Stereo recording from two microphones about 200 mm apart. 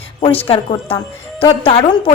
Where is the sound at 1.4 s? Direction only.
25° left (ahead or behind).